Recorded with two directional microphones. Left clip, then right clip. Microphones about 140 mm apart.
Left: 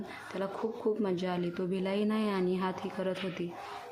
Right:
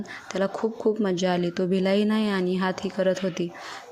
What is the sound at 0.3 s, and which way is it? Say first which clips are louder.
A woman's voice: right 9 dB; 40° right (ahead or behind).